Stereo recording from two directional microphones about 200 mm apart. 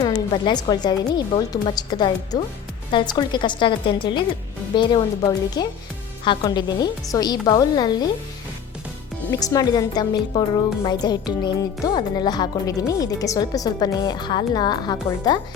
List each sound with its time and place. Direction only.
0.0 s a woman's voice: 20° left (ahead or behind)
9.3 s a woman's voice: 20° left (ahead or behind)